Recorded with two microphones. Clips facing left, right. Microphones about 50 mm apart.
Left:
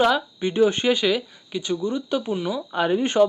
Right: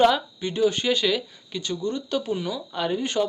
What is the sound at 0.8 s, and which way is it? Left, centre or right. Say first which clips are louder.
Speech: left 3 dB; centre.